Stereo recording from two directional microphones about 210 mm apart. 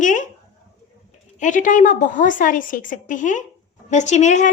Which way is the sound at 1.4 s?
40° left (ahead or behind).